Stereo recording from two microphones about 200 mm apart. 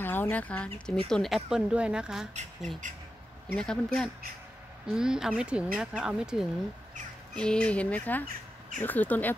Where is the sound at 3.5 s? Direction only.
5° left (ahead or behind).